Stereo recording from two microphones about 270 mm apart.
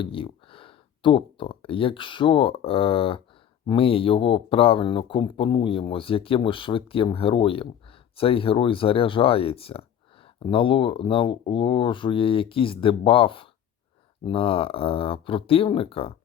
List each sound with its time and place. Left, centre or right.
0.0 s speech: centre